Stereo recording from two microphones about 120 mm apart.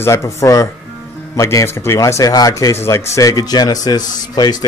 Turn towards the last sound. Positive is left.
turn(degrees=90)